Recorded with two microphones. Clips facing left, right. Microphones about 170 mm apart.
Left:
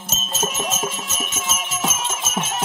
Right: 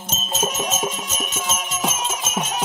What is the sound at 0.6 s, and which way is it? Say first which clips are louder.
Music: right 1 dB; 5° left (ahead or behind).